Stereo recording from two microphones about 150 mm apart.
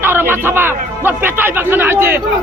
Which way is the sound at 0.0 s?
15° right (ahead or behind).